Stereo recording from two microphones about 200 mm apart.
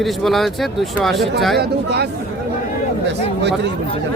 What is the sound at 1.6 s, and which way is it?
Speech, 55° right (ahead or behind).